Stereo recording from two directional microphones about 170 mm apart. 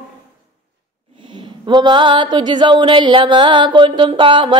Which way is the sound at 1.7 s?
25° right (ahead or behind).